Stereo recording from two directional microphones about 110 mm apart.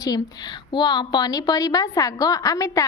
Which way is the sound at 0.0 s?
40° left (ahead or behind).